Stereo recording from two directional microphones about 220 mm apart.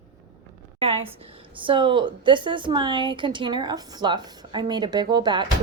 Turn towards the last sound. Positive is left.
turn(degrees=-20)  # may be behind; listen again after turning